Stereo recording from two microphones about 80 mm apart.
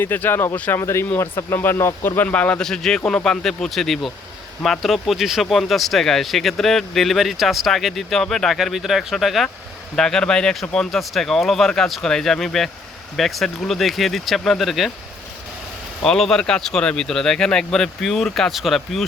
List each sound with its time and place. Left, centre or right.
0.0 s speech: left
0.8 s speech: left
2.6 s speech: centre
16.0 s speech: centre